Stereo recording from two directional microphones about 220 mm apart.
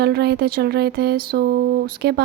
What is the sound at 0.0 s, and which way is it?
A woman's voice, 45° right (ahead or behind).